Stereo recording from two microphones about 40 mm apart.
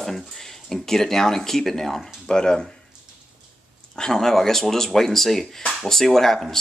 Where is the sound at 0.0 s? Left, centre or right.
Centre.